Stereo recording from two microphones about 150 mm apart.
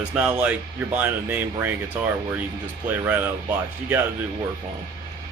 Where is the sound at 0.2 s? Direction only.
10° right (ahead or behind).